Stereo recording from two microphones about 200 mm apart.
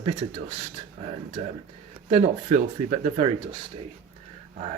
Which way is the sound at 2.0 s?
30° right (ahead or behind).